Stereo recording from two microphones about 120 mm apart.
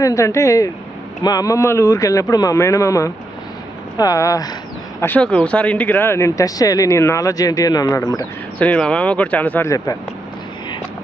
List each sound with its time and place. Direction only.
0.0 s speech: 25° left (ahead or behind)
4.9 s speech: 15° left (ahead or behind)
8.5 s speech: 10° left (ahead or behind)
9.6 s speech: 30° left (ahead or behind)